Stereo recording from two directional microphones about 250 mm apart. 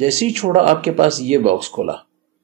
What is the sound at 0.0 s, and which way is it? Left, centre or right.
Speech, right.